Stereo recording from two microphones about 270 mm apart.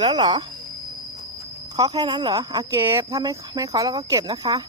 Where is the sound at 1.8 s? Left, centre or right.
Centre.